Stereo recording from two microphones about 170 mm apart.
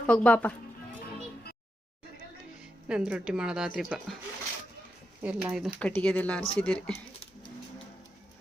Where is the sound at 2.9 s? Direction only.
5° right (ahead or behind).